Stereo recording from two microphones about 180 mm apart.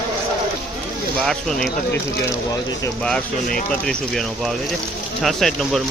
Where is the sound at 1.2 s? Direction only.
Centre (ahead or behind).